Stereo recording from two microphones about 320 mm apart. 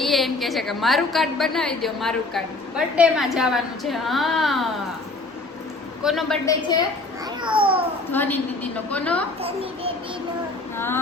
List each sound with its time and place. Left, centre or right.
0.0 s a woman's voice: centre
6.0 s a woman's voice: centre
7.4 s a child's voice: centre
8.1 s a woman's voice: centre
9.4 s a child's voice: centre
10.8 s female singing: centre